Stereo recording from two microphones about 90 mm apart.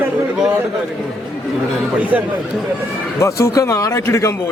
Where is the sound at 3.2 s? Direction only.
35° left (ahead or behind).